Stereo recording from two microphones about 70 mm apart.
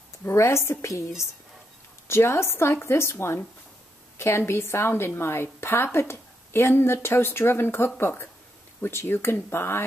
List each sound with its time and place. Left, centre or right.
0.3 s a woman's voice: left